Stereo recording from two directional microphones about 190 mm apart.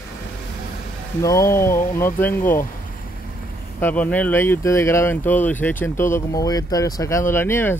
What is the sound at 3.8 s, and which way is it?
Speech, 10° left (ahead or behind).